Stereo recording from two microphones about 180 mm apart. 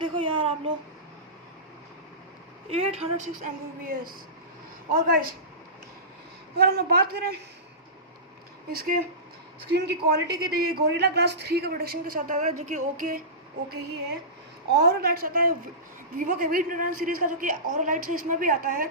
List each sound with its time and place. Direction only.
0.0 s a sound: 30° right (ahead or behind)
2.7 s a woman's voice: 35° right (ahead or behind)
4.9 s a woman's voice: 55° right (ahead or behind)
6.5 s a woman's voice: 60° right (ahead or behind)
8.6 s a woman's voice: 55° right (ahead or behind)
9.8 s a woman's voice: 65° right (ahead or behind); by 13.2 s 45° right (ahead or behind)
14.7 s a woman's voice: 65° right (ahead or behind)